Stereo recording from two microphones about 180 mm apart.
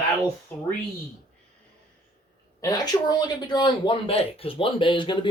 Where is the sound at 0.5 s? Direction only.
5° left (ahead or behind).